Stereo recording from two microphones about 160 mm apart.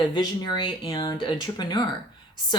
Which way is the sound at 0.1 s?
30° left (ahead or behind).